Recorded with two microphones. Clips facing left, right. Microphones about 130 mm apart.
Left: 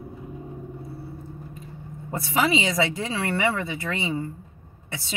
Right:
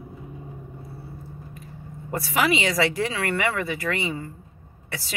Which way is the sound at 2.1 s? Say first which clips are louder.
Even; 20° left (ahead or behind).